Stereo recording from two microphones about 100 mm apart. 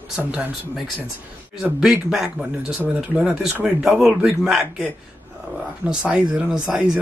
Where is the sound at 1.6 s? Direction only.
5° right (ahead or behind).